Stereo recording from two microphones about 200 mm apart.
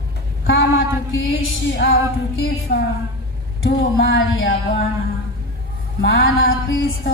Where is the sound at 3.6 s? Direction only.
70° left (ahead or behind).